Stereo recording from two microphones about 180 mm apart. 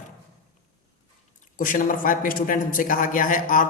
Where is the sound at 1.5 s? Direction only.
50° left (ahead or behind).